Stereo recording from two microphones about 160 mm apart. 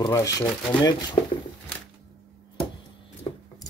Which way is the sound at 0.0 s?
20° left (ahead or behind).